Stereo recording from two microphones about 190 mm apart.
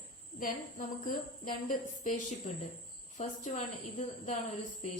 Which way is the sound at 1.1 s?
45° left (ahead or behind).